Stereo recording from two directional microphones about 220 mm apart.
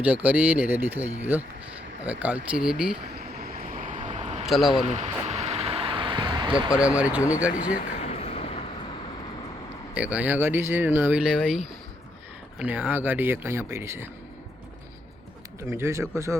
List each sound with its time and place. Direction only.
0.0 s speech: 5° right (ahead or behind)
3.4 s vehicle: 35° right (ahead or behind)
4.4 s speech: centre (ahead or behind)
4.9 s a sound: 30° right (ahead or behind)
6.5 s speech: 5° right (ahead or behind)
8.0 s vehicle: 30° left (ahead or behind)
9.9 s speech: 5° right (ahead or behind)
15.7 s speech: 10° right (ahead or behind)